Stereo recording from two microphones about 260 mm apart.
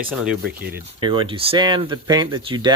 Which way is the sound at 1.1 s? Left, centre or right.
Centre.